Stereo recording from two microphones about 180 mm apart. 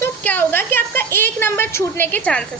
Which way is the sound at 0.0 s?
10° left (ahead or behind).